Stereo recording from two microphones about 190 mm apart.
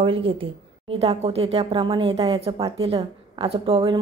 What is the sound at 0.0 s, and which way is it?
A woman's voice, 30° right (ahead or behind).